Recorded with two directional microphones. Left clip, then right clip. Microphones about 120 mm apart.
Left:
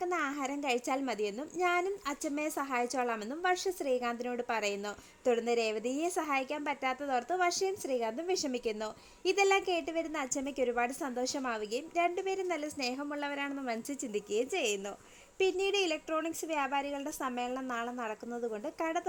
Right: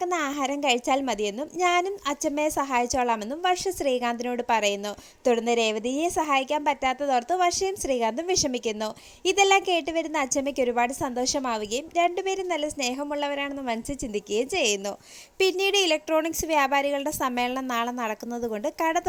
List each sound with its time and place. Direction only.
0.0 s a woman's voice: 30° right (ahead or behind)
3.7 s a woman's voice: 35° right (ahead or behind)
7.7 s a woman's voice: 35° right (ahead or behind)